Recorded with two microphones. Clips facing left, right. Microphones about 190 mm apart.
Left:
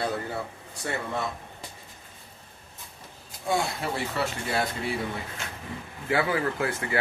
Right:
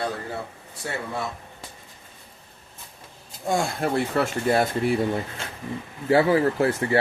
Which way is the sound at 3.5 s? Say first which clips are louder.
Right 4 dB; 50° right (ahead or behind).